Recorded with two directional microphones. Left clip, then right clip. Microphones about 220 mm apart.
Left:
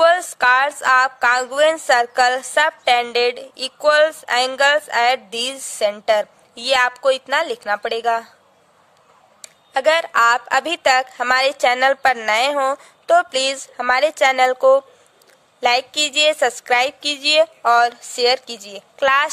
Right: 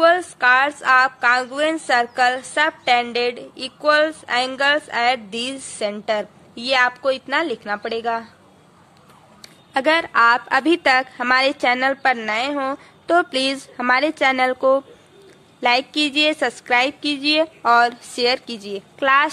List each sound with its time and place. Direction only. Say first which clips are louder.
0.0 s speech: left 1 dB; 35° left (ahead or behind)
9.4 s a woman's voice: left 2 dB; 30° left (ahead or behind)